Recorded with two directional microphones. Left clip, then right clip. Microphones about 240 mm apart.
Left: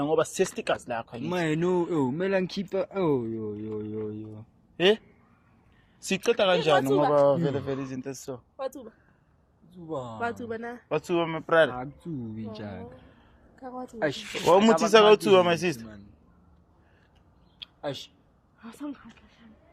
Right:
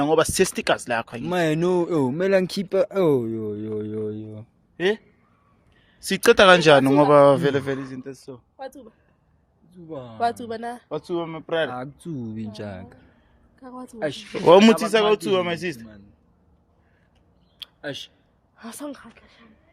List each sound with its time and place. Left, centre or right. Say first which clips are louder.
0.0 s speech: right 6 dB; right
4.8 s a man's voice: left 1 dB; centre
6.2 s speech: right 10 dB; right
7.9 s a man's voice: left 1 dB; centre
10.2 s speech: right 11 dB; right
10.8 s a man's voice: left 4 dB; centre
11.7 s speech: right 3 dB; right
13.6 s speech: right 1 dB; centre
14.3 s speech: right 7 dB; right
14.8 s speech: left 2 dB; centre
15.0 s a man's voice: left 2 dB; centre
17.8 s a man's voice: right 1 dB; centre
18.5 s speech: right 4 dB; right